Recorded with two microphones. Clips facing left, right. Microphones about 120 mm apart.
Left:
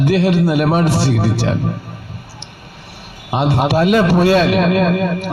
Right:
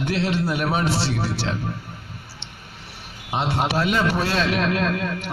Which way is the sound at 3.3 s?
55° left (ahead or behind).